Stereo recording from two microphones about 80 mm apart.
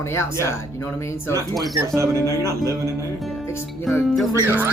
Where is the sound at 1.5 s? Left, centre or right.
Centre.